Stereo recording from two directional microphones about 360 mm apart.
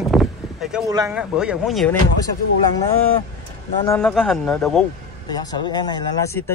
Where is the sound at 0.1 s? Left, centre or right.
Centre.